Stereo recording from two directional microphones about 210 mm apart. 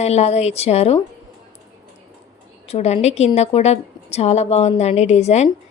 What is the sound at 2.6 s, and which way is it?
A woman's voice, 30° left (ahead or behind).